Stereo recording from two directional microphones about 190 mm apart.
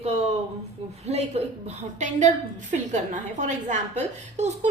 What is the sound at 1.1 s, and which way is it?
A woman's voice, 35° right (ahead or behind).